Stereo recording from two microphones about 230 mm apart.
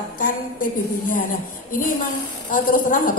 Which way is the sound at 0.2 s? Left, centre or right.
Left.